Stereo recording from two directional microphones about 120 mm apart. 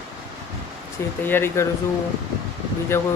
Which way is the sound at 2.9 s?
20° left (ahead or behind).